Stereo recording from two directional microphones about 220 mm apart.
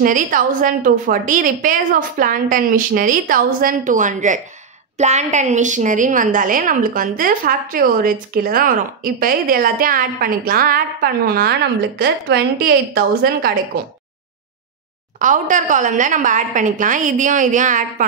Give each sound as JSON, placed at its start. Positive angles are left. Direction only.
{"t": 0.0, "sound": "a woman's voice", "side_deg": -40}
{"t": 15.1, "sound": "a woman's voice", "side_deg": -35}